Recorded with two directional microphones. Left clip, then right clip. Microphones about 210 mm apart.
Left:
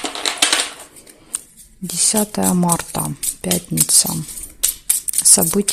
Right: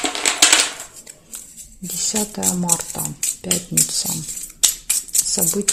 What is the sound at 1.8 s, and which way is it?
Speech, 30° left (ahead or behind).